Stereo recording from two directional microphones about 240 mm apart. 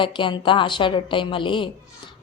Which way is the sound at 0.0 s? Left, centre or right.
Left.